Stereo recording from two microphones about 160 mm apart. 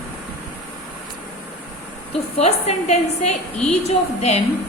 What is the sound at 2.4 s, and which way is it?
A woman's voice, 45° left (ahead or behind).